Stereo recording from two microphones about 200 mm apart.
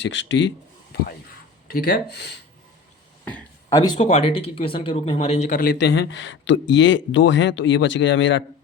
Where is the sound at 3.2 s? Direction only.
15° left (ahead or behind).